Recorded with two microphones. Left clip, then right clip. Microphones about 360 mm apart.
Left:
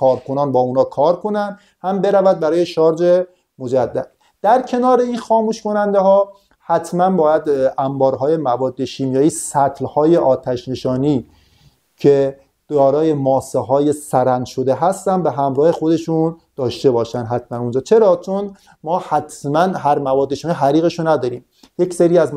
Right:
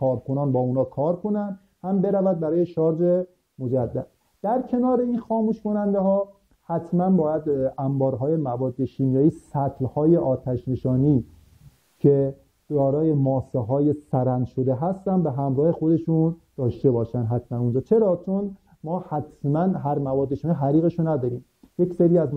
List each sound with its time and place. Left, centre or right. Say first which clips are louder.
0.1 s speech: left 9 dB; centre
16.2 s speech: left 7 dB; centre
16.6 s speech: left 7 dB; centre